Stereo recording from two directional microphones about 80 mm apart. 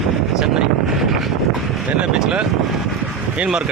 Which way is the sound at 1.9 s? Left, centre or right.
Centre.